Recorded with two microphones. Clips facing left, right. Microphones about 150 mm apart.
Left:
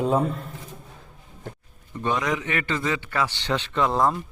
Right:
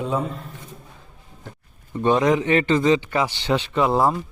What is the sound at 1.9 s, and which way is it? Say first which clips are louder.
A man's voice: right 7 dB; 30° right (ahead or behind).